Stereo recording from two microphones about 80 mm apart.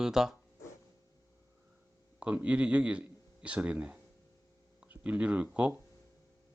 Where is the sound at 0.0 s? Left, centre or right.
Centre.